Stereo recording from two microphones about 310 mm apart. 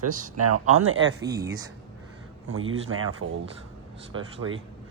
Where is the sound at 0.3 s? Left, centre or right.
Right.